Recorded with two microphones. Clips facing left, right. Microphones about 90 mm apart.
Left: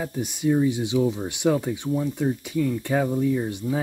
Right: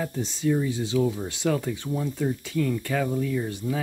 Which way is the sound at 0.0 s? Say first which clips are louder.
Left 1 dB; 15° left (ahead or behind).